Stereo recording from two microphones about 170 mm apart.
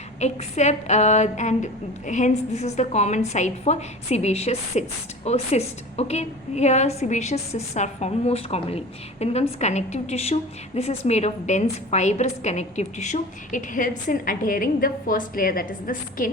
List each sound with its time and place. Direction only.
0.2 s a woman's voice: 40° left (ahead or behind)